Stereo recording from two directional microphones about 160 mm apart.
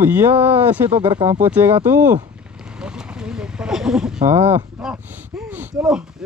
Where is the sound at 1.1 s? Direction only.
35° right (ahead or behind).